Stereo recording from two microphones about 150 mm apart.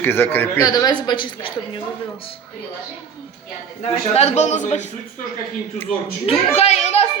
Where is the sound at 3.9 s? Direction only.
45° left (ahead or behind).